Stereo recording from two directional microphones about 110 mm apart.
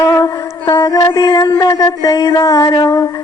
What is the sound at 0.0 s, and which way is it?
Mantra, 35° left (ahead or behind).